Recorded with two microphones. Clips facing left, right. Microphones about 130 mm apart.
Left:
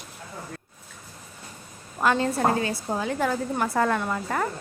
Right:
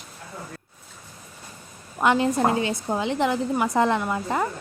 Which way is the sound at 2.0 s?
20° right (ahead or behind).